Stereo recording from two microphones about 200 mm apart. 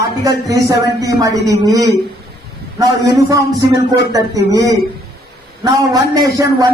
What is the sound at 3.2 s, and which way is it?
A man's voice, 15° right (ahead or behind).